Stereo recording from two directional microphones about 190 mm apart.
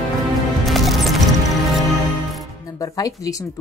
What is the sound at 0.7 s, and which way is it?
Music, centre (ahead or behind).